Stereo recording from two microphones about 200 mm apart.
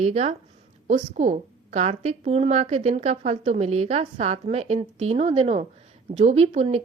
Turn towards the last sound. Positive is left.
turn(degrees=-35)  # may be behind; listen again after turning